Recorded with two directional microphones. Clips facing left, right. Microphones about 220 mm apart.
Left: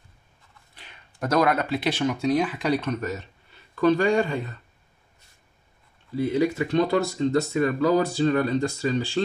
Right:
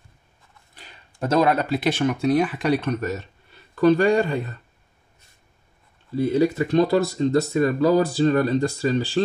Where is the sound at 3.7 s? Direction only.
40° right (ahead or behind).